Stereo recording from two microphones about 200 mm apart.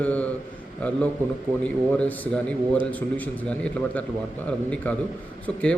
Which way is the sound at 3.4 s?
5° left (ahead or behind).